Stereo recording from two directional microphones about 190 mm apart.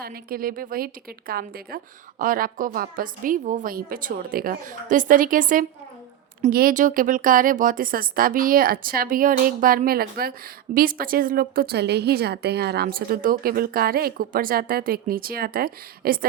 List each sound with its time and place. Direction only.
0.0 s a woman's voice: 50° right (ahead or behind)